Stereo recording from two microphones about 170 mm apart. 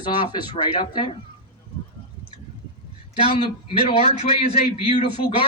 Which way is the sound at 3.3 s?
30° left (ahead or behind).